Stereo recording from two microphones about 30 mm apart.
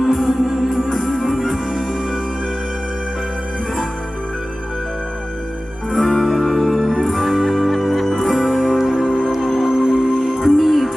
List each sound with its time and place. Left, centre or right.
0.0 s music: centre
6.0 s music: centre
7.0 s music: centre
7.4 s music: centre
8.3 s music: centre
9.4 s music: centre
9.6 s music: centre